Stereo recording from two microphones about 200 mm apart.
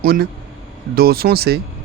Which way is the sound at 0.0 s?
50° right (ahead or behind).